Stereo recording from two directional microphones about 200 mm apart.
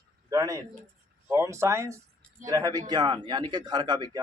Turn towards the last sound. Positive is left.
turn(degrees=-20)  # may be behind; listen again after turning